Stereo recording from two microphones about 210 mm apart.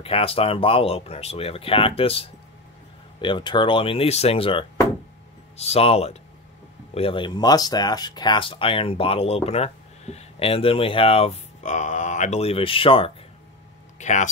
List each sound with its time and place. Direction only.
0.0 s speech: 25° left (ahead or behind)